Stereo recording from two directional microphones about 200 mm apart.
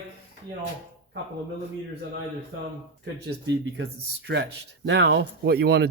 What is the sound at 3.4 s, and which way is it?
Speech, 60° right (ahead or behind).